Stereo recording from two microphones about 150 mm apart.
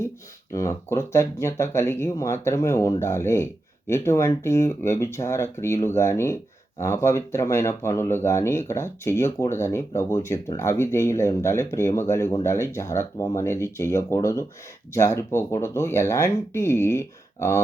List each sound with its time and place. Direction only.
0.5 s speech: 20° left (ahead or behind)